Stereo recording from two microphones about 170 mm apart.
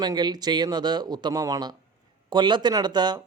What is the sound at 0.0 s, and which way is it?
Speech, 25° right (ahead or behind).